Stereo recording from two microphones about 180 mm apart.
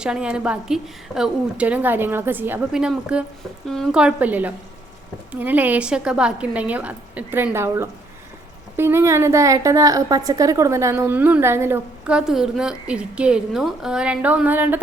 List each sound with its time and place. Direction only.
0.0 s a woman's voice: 5° right (ahead or behind)